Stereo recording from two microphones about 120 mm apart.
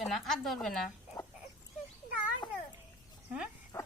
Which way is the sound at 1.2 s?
30° left (ahead or behind).